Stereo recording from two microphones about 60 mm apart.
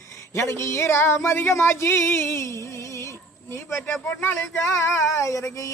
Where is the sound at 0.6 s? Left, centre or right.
Left.